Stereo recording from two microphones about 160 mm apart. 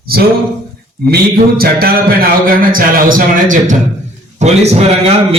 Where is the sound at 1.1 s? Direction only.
70° right (ahead or behind).